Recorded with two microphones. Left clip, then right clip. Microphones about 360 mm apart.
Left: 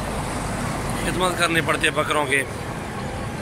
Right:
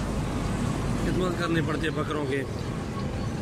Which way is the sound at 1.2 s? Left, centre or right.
Centre.